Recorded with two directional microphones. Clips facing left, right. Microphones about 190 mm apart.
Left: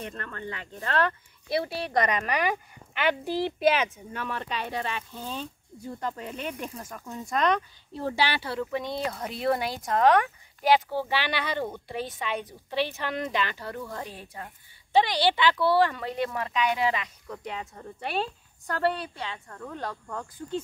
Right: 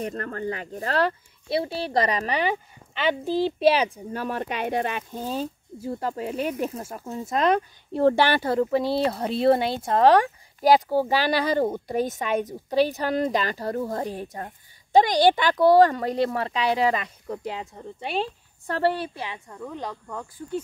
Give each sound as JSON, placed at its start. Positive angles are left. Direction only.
{"t": 0.0, "sound": "speech", "side_deg": -35}
{"t": 6.2, "sound": "speech", "side_deg": -10}
{"t": 6.8, "sound": "speech", "side_deg": -30}
{"t": 8.1, "sound": "speech", "side_deg": -50}
{"t": 18.7, "sound": "speech", "side_deg": -25}